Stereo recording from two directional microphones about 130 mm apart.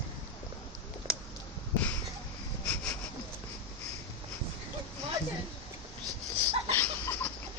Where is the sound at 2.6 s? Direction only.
10° left (ahead or behind).